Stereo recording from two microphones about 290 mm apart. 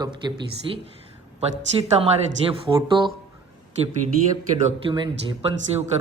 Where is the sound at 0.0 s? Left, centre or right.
Centre.